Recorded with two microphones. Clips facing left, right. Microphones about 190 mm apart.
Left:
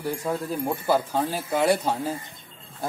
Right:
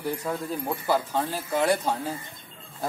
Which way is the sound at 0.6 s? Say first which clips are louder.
Left 3 dB; 10° left (ahead or behind).